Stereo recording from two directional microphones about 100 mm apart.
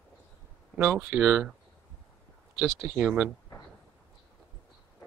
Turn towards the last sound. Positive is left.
turn(degrees=-10)  # may be behind; listen again after turning